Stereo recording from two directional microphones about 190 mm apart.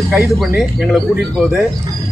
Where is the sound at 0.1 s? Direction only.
Centre (ahead or behind).